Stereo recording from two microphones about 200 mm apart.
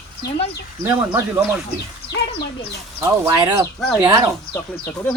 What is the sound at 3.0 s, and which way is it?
Speech, 15° right (ahead or behind).